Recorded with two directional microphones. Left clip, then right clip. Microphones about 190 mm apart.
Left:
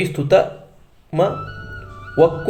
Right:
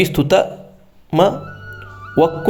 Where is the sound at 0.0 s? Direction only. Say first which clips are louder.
Right 1 dB; 55° right (ahead or behind).